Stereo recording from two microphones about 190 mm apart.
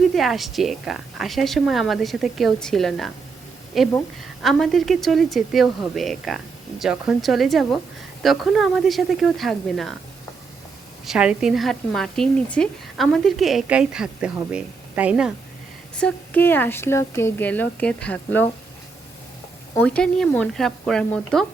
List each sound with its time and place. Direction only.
0.1 s a woman's voice: centre (ahead or behind)
11.0 s a woman's voice: 5° right (ahead or behind)
16.0 s speech: 5° left (ahead or behind)
19.7 s a woman's voice: 5° left (ahead or behind)